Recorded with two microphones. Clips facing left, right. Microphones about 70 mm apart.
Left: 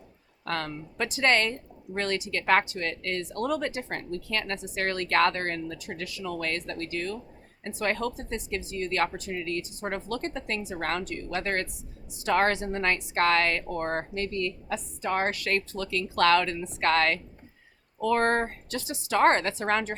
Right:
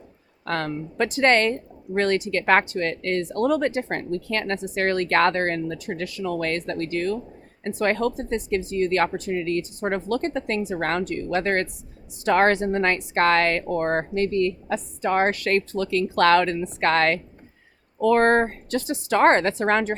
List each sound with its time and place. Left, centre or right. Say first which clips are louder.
0.4 s speech: right 5 dB; right